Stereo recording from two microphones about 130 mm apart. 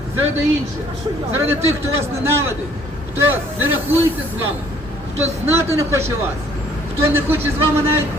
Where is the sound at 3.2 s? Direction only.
15° right (ahead or behind).